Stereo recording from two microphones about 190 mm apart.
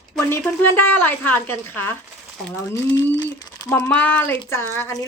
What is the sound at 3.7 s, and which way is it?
A woman's voice, 10° left (ahead or behind).